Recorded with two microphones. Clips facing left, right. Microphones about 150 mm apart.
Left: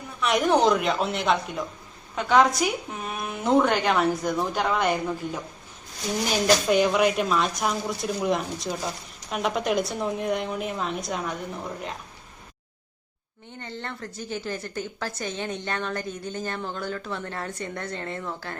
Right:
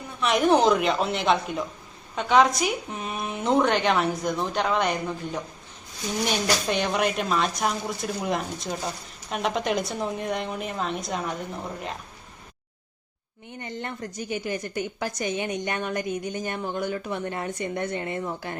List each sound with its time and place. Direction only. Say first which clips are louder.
0.2 s a woman's voice: right 1 dB; centre (ahead or behind)
6.7 s a woman's voice: left 4 dB; 5° left (ahead or behind)
13.6 s a woman's voice: right 2 dB; 15° right (ahead or behind)